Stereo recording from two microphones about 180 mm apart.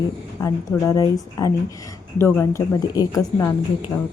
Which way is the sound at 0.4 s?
20° left (ahead or behind).